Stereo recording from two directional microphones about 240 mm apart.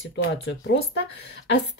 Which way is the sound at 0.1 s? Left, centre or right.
Left.